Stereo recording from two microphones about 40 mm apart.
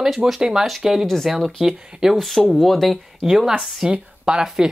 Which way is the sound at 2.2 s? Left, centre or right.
Centre.